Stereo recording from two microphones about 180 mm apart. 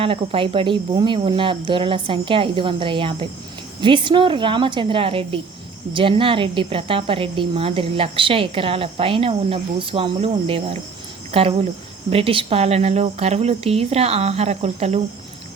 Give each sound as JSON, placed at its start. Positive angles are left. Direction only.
{"t": 0.0, "sound": "speech", "side_deg": -30}